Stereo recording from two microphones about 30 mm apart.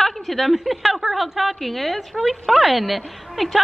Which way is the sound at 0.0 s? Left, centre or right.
Centre.